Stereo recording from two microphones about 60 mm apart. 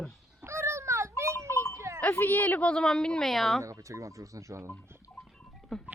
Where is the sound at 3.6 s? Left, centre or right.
Right.